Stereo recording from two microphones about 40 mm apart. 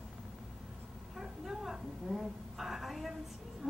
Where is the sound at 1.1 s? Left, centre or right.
Centre.